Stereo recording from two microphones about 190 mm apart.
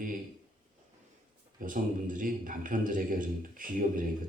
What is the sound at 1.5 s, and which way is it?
A man's voice, 45° right (ahead or behind).